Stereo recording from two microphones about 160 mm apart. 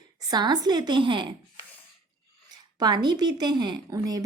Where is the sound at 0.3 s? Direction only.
25° right (ahead or behind).